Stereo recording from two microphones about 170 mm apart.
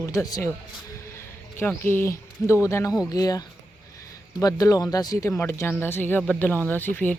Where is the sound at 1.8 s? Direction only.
15° left (ahead or behind).